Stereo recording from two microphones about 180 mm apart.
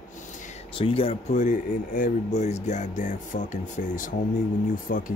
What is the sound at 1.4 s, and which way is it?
Speech, 50° left (ahead or behind).